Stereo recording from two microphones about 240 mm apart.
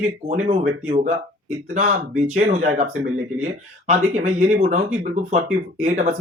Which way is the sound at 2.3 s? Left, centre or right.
Right.